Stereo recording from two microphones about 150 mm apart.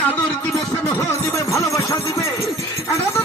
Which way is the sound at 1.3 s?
20° left (ahead or behind).